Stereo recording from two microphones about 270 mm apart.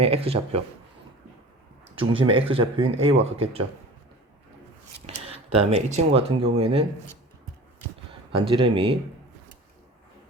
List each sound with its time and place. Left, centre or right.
0.0 s speech: right
2.0 s speech: centre
4.9 s speech: right
8.3 s speech: centre